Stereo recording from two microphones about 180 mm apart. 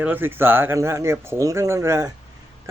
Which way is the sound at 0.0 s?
10° right (ahead or behind).